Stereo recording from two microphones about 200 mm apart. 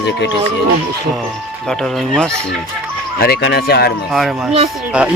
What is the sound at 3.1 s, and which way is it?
Speech, 50° left (ahead or behind).